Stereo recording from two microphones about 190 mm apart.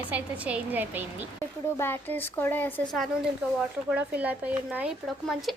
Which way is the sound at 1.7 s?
10° left (ahead or behind).